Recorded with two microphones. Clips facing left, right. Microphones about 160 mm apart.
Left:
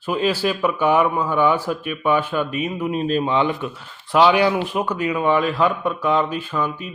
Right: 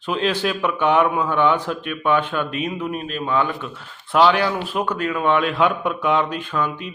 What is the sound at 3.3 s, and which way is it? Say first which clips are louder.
Speech: right 2 dB; 20° left (ahead or behind).